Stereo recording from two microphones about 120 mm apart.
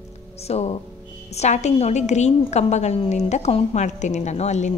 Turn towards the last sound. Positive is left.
turn(degrees=70)  # may be behind; listen again after turning